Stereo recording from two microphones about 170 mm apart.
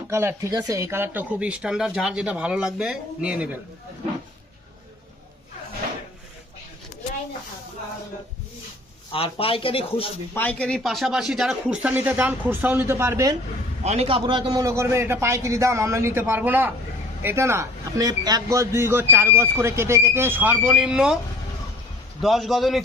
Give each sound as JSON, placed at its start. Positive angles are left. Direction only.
{"t": 0.1, "sound": "speech", "side_deg": -15}
{"t": 9.1, "sound": "speech", "side_deg": 35}
{"t": 10.3, "sound": "speech", "side_deg": 10}
{"t": 13.8, "sound": "speech", "side_deg": -40}
{"t": 22.2, "sound": "a man's voice", "side_deg": 0}